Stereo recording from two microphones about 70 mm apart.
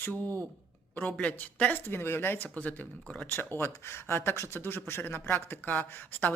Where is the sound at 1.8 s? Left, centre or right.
Left.